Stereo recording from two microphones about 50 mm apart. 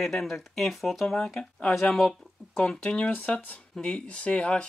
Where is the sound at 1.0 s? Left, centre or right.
Centre.